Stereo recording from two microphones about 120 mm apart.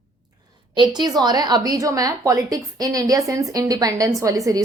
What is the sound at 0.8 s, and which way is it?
A woman's voice, 35° right (ahead or behind).